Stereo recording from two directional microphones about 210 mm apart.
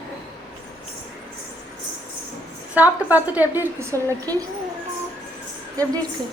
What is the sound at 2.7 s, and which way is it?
A woman's voice, 10° right (ahead or behind).